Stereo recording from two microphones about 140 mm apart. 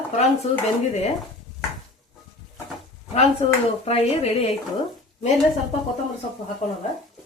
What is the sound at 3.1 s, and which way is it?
Speech, 45° left (ahead or behind).